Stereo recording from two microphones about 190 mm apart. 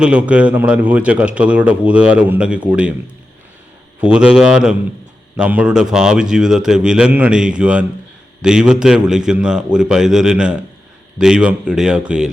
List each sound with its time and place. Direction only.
0.0 s a man's voice: 5° right (ahead or behind)
4.0 s a man's voice: 5° right (ahead or behind)